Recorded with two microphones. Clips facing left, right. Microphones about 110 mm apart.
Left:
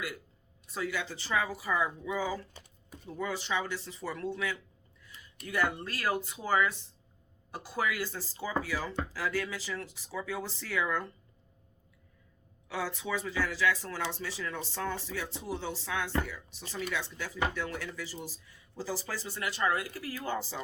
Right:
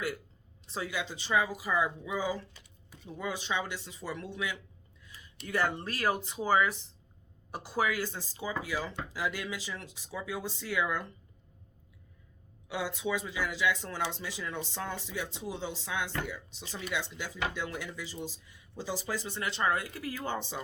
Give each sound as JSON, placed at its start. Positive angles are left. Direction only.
{"t": 0.7, "sound": "speech", "side_deg": -20}
{"t": 6.3, "sound": "speech", "side_deg": -10}
{"t": 7.7, "sound": "speech", "side_deg": -15}
{"t": 12.6, "sound": "speech", "side_deg": -15}